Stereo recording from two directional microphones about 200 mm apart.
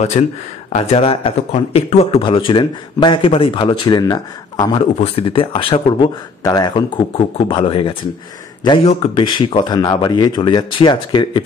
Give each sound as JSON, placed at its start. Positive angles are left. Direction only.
{"t": 0.7, "sound": "speech", "side_deg": 35}
{"t": 4.7, "sound": "speech", "side_deg": 30}